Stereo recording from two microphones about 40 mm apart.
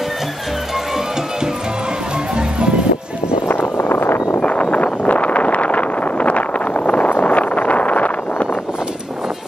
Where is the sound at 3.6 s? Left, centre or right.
Left.